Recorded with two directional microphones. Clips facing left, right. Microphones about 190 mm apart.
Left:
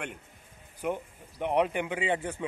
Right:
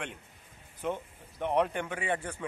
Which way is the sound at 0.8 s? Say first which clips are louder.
Left 2 dB; 15° left (ahead or behind).